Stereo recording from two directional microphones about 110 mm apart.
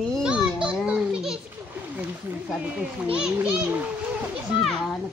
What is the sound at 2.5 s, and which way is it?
A child's voice, 5° right (ahead or behind).